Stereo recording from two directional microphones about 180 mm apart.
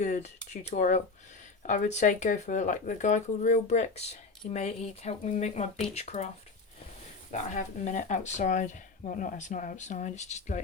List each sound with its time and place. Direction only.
0.0 s speech: 40° left (ahead or behind)